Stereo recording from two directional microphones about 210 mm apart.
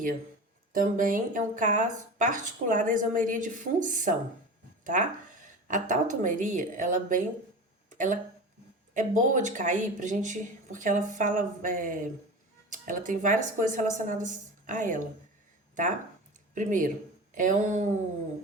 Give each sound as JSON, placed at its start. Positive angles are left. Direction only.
{"t": 0.7, "sound": "speech", "side_deg": -40}
{"t": 16.6, "sound": "speech", "side_deg": -40}